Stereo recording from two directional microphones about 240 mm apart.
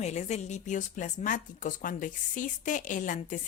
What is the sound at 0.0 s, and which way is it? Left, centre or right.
Speech, left.